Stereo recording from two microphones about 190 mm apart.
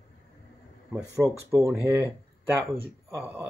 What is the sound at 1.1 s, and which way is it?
Speech, 15° right (ahead or behind).